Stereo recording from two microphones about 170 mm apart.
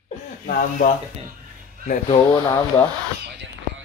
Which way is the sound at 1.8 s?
45° left (ahead or behind).